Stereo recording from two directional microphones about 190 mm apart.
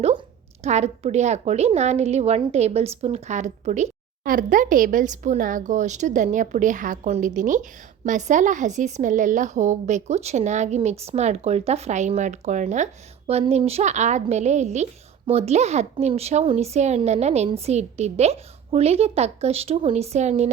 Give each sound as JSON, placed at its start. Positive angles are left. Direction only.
{"t": 0.6, "sound": "a woman's voice", "side_deg": -35}